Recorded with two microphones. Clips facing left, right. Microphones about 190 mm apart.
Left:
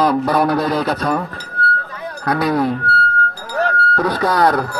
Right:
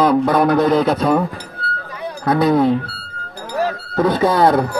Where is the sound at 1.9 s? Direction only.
15° right (ahead or behind).